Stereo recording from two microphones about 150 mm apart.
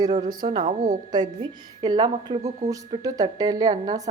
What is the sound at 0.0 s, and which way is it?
A woman's voice, 25° right (ahead or behind).